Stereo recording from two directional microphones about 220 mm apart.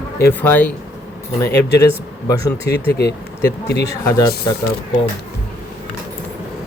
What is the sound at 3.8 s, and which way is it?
Speech, 15° left (ahead or behind).